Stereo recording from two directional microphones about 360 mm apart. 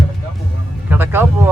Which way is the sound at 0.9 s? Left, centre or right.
Centre.